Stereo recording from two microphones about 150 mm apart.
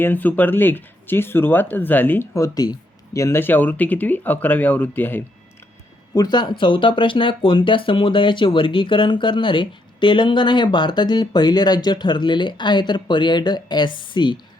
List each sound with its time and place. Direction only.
0.0 s speech: 10° left (ahead or behind)
6.1 s speech: 30° left (ahead or behind)